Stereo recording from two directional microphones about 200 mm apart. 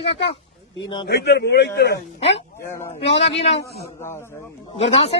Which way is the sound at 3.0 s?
30° left (ahead or behind).